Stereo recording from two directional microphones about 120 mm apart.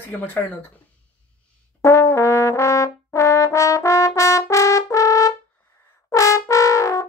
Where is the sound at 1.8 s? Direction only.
25° left (ahead or behind).